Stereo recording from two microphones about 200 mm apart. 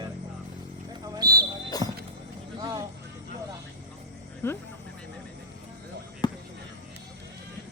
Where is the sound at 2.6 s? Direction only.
20° right (ahead or behind).